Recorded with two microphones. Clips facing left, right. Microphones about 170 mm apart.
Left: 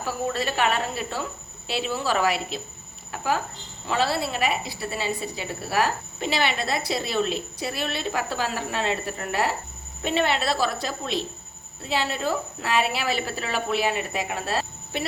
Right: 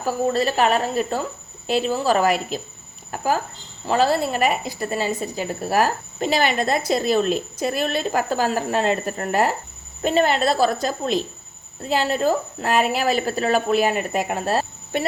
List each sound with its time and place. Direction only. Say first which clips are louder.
0.0 s a woman's voice: right 6 dB; 40° right (ahead or behind)
3.8 s a woman's voice: right 6 dB; 45° right (ahead or behind)